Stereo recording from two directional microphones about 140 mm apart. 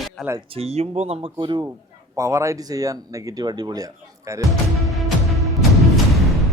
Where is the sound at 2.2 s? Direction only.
20° right (ahead or behind).